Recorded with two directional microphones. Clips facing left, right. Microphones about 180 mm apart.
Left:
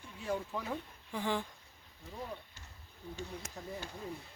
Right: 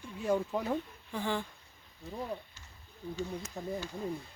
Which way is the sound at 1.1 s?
10° left (ahead or behind).